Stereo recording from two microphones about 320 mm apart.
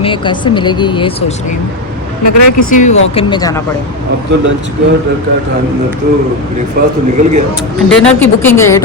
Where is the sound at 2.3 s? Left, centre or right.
Left.